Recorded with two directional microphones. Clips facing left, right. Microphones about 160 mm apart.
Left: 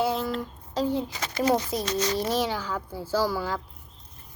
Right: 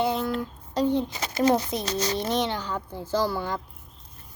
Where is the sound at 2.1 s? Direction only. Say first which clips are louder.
Even; 5° left (ahead or behind).